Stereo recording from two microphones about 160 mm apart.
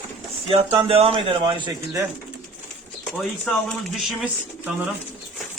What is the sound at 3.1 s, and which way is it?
Speech, 5° left (ahead or behind).